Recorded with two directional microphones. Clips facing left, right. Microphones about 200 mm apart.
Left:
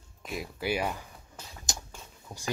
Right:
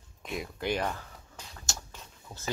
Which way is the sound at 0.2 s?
Centre (ahead or behind).